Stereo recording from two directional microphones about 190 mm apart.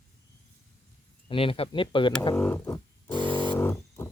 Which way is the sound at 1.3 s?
30° left (ahead or behind).